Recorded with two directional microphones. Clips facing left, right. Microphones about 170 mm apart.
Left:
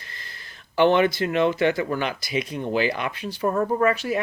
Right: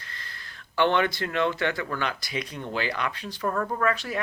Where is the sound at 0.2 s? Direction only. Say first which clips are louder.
Even; 15° left (ahead or behind).